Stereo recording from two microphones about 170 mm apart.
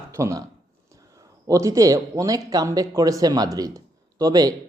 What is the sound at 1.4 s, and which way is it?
Speech, 20° right (ahead or behind).